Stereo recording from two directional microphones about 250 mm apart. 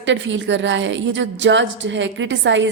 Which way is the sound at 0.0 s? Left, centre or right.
Right.